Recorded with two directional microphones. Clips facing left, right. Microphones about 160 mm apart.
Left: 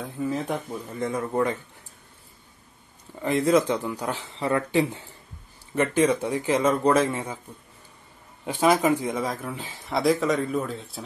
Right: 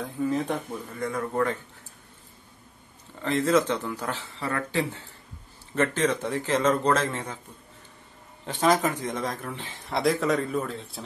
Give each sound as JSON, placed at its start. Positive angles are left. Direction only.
{"t": 0.0, "sound": "speech", "side_deg": 5}
{"t": 0.9, "sound": "a man's voice", "side_deg": 20}
{"t": 3.2, "sound": "speech", "side_deg": 15}
{"t": 8.5, "sound": "speech", "side_deg": 10}